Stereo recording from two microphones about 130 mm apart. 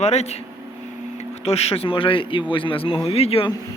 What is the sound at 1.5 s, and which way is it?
A man's voice, 50° left (ahead or behind).